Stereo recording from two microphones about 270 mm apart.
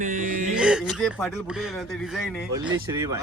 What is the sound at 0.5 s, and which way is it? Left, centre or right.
Speech, centre.